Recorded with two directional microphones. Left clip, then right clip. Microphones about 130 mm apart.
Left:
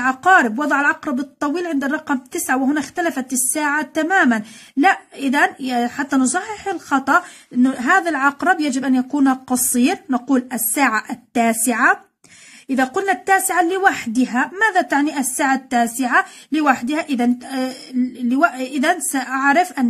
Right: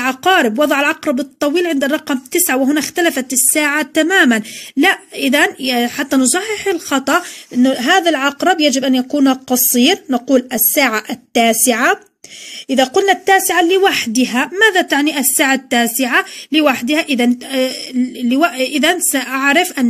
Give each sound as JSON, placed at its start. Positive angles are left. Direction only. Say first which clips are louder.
{"t": 0.0, "sound": "speech", "louder": "right 1 dB", "side_deg": -25}